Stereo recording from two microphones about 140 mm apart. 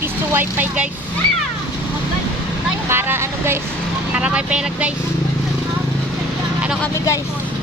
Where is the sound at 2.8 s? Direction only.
15° right (ahead or behind).